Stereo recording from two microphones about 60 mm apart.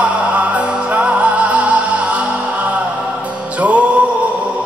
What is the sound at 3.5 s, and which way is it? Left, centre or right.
Music, right.